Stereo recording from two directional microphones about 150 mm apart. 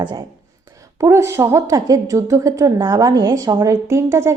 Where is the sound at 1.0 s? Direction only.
20° right (ahead or behind).